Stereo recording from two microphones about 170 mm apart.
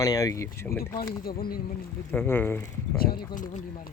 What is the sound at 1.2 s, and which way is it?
Speech, 60° left (ahead or behind).